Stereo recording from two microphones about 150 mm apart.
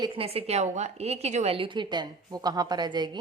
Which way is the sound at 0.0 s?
35° right (ahead or behind).